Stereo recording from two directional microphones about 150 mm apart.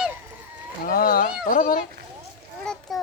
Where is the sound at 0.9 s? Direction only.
75° left (ahead or behind).